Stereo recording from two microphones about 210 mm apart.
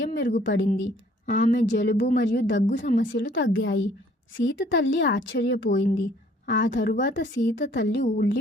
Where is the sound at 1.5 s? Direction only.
60° left (ahead or behind).